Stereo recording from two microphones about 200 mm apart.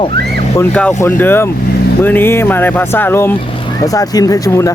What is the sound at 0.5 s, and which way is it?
Speech, 10° left (ahead or behind).